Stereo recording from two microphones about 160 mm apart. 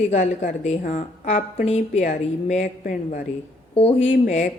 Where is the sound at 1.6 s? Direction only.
40° left (ahead or behind).